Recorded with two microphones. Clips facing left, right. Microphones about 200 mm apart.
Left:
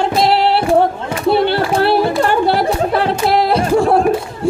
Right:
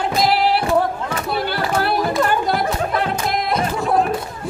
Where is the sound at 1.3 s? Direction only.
30° left (ahead or behind).